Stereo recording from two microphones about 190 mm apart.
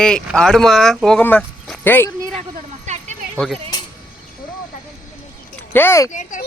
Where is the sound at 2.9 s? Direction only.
40° right (ahead or behind).